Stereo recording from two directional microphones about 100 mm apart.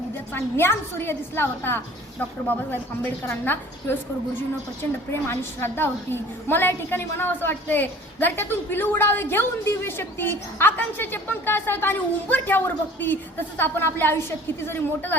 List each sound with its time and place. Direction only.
0.3 s a woman's voice: 25° left (ahead or behind)
5.3 s a woman's voice: 25° left (ahead or behind)